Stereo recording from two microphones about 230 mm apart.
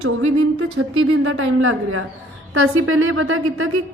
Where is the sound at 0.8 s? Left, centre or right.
Right.